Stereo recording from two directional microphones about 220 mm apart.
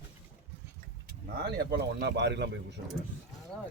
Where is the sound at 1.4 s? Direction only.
45° right (ahead or behind).